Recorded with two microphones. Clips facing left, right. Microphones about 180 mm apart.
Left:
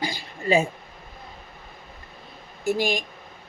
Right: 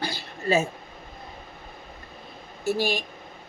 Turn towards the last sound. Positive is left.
turn(degrees=15)  # may be behind; listen again after turning